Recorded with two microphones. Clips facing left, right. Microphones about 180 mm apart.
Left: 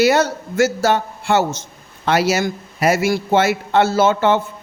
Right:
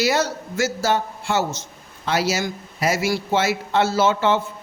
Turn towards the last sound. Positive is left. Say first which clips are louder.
# left 4 dB
turn(degrees=55)  # may be behind; listen again after turning